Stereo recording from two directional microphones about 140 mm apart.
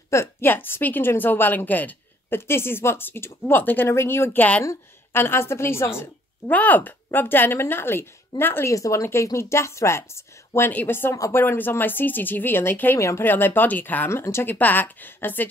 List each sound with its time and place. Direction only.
0.1 s speech: 15° left (ahead or behind)